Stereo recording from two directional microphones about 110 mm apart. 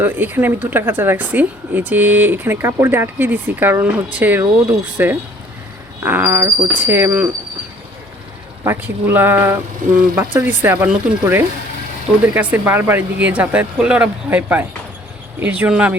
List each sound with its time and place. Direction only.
0.0 s speech: 20° right (ahead or behind)
8.6 s speech: 20° right (ahead or behind)